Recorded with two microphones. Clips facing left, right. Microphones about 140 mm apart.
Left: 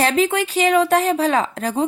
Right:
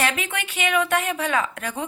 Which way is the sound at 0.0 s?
35° left (ahead or behind).